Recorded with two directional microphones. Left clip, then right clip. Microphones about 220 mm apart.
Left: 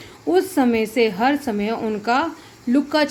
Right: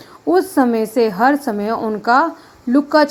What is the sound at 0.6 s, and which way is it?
A woman's voice, 20° right (ahead or behind).